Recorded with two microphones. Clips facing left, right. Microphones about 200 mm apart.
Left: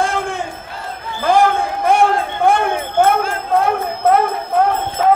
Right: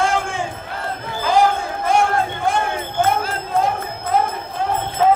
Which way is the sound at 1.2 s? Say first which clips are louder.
Left 3 dB; 55° left (ahead or behind).